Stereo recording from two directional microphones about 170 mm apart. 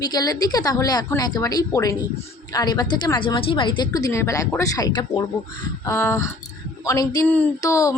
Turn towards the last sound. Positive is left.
turn(degrees=20)  # may be behind; listen again after turning